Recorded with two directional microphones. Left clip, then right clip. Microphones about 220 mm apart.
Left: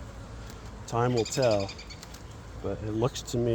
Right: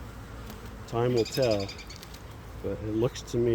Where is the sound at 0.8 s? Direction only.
40° left (ahead or behind).